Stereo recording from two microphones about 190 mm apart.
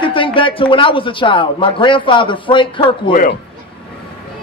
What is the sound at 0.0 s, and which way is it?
Speech, 25° left (ahead or behind).